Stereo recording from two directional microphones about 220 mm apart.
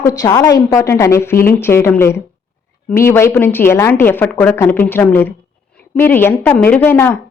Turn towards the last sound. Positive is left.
turn(degrees=10)  # may be behind; listen again after turning